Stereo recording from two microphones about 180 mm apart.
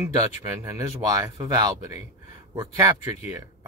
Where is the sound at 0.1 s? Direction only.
15° right (ahead or behind).